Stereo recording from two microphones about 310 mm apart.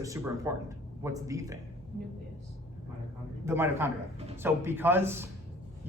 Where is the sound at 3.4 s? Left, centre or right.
Centre.